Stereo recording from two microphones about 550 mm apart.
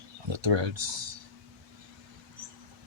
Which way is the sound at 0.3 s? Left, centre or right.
Right.